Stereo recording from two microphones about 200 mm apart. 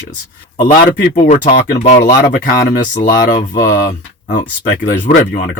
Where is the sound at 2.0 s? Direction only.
45° left (ahead or behind).